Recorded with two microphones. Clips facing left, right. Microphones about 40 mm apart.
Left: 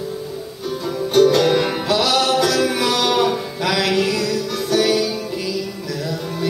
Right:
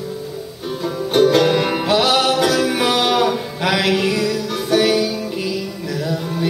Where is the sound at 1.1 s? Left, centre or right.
Centre.